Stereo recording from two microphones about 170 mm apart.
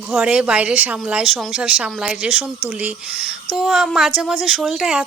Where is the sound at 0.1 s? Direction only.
5° right (ahead or behind).